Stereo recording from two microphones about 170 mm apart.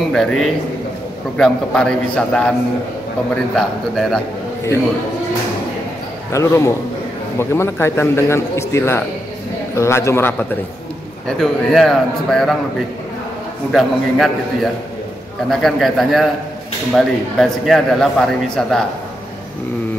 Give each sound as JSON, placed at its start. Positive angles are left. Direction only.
{"t": 0.1, "sound": "a man's voice", "side_deg": 0}
{"t": 3.5, "sound": "a man's voice", "side_deg": 0}
{"t": 6.3, "sound": "a man's voice", "side_deg": 15}
{"t": 11.2, "sound": "a man's voice", "side_deg": 0}
{"t": 13.7, "sound": "a man's voice", "side_deg": 0}